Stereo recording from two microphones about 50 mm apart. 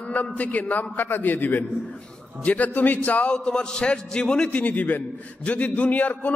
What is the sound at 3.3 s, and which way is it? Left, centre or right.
A man's voice, centre.